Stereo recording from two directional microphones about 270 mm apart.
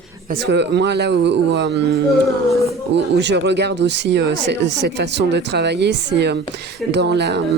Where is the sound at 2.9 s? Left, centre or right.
Right.